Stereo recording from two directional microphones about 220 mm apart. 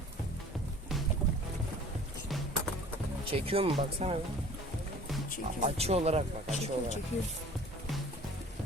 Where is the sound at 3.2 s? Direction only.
25° right (ahead or behind).